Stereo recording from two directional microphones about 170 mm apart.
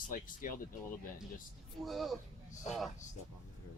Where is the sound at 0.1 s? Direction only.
55° left (ahead or behind).